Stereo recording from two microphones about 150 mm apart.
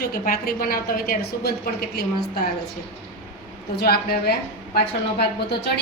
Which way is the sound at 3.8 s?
90° left.